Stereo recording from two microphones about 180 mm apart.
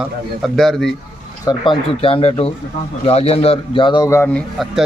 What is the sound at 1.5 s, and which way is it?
A man's voice, 30° left (ahead or behind).